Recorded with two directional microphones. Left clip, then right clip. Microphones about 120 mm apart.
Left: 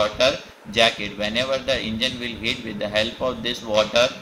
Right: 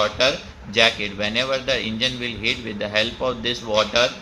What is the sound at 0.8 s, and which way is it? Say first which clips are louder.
Speech: right 1 dB; 25° right (ahead or behind).